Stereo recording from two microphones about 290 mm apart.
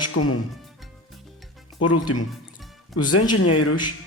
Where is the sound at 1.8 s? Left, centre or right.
Left.